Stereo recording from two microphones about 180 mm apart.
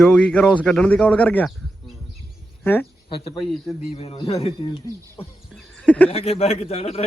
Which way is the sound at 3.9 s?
30° left (ahead or behind).